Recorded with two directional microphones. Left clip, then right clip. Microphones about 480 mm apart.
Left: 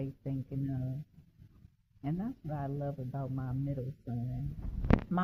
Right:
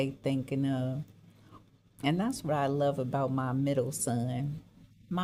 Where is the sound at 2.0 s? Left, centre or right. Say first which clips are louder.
Right 9 dB; centre.